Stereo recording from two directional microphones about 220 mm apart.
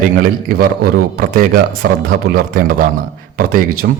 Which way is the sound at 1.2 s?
40° right (ahead or behind).